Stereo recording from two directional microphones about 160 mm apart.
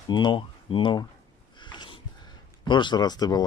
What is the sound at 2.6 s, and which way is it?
Speech, 30° left (ahead or behind).